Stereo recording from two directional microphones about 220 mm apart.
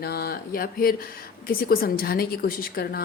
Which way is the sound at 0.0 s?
45° left (ahead or behind).